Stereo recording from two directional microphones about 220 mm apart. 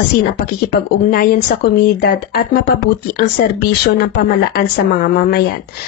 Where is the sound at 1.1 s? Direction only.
45° left (ahead or behind).